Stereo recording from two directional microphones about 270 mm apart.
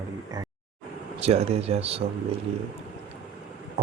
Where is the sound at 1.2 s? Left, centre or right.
Right.